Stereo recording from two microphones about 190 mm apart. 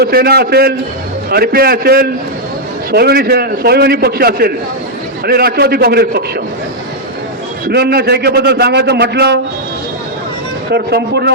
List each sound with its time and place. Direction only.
0.0 s a man's voice: 55° right (ahead or behind)
7.7 s a man's voice: 55° right (ahead or behind)
10.7 s a man's voice: 60° right (ahead or behind)